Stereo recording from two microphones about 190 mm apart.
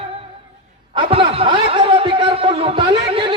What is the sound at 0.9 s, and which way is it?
Chuckle, 30° right (ahead or behind).